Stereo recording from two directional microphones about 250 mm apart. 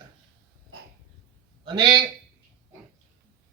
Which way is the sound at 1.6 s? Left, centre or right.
Centre.